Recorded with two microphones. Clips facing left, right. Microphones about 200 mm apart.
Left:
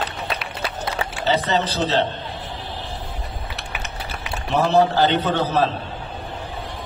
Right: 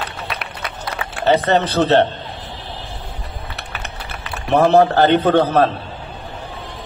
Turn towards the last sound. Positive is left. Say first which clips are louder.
# right 6 dB
turn(degrees=-55)  # may be behind; listen again after turning